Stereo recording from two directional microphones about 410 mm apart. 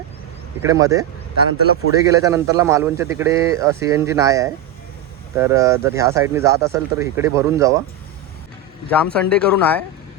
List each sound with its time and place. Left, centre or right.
0.6 s a man's voice: centre
8.9 s speech: centre